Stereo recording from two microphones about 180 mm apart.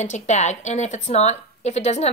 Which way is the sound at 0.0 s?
40° left (ahead or behind).